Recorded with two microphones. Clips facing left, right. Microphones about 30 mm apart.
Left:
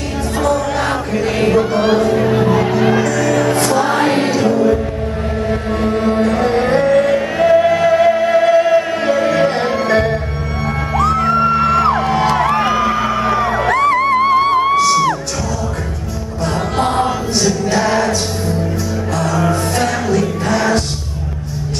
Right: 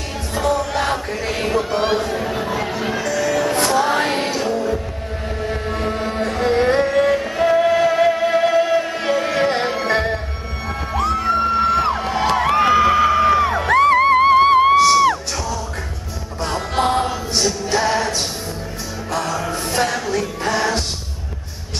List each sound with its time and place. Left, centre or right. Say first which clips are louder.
0.4 s music: left 3 dB; centre
2.1 s music: left 8 dB; centre
3.0 s music: left 5 dB; centre
7.2 s music: left 5 dB; centre
7.5 s music: left 4 dB; centre
8.5 s music: left 5 dB; centre
9.0 s music: left 5 dB; centre
11.3 s music: left 4 dB; centre
12.5 s music: right 1 dB; centre
13.7 s music: right 1 dB; centre
16.7 s chant: even; centre
17.4 s music: left 3 dB; centre
19.1 s music: left 5 dB; centre